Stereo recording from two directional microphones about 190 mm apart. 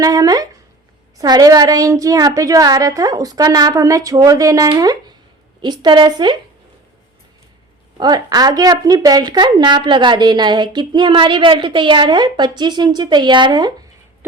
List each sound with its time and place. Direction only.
0.0 s speech: 20° right (ahead or behind)
7.9 s speech: 20° right (ahead or behind)